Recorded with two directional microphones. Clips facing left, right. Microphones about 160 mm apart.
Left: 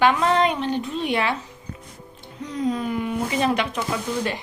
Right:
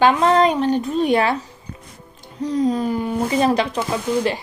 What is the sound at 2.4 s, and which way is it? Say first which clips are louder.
A woman's voice: right 6 dB; 35° right (ahead or behind).